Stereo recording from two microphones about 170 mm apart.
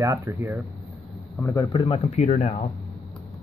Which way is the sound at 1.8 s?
35° left (ahead or behind).